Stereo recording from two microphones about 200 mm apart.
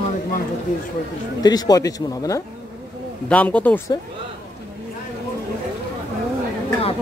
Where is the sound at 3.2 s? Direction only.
5° left (ahead or behind).